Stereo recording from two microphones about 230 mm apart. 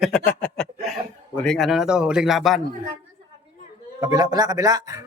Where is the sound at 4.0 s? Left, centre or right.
Centre.